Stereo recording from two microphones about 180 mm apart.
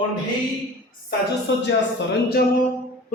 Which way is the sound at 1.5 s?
90° left.